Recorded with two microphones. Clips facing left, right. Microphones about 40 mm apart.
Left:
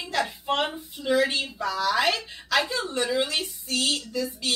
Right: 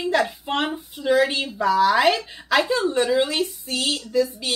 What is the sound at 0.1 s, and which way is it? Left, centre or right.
A woman's voice, centre.